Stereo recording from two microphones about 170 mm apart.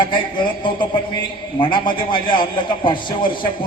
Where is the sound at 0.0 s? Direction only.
30° left (ahead or behind).